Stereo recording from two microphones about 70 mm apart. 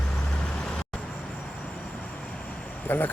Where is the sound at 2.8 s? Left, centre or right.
Left.